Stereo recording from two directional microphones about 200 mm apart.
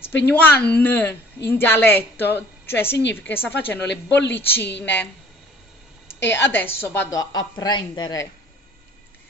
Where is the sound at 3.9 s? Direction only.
60° left (ahead or behind).